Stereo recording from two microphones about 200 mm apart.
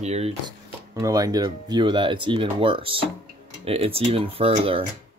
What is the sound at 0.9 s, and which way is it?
Speech, 20° right (ahead or behind).